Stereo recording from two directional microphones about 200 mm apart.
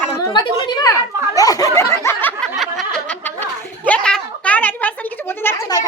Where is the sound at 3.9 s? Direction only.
5° left (ahead or behind).